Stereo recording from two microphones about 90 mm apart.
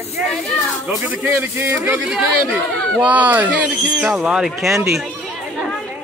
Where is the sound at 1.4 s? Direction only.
25° right (ahead or behind).